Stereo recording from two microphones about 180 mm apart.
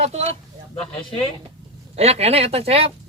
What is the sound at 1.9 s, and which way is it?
Speech, 35° right (ahead or behind).